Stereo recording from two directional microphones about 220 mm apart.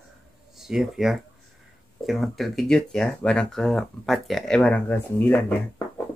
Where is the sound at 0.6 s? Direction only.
Centre (ahead or behind).